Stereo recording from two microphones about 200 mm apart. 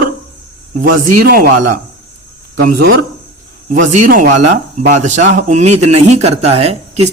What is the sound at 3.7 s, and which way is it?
Speech, 40° right (ahead or behind).